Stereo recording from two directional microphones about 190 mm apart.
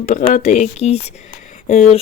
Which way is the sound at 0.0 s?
40° left (ahead or behind).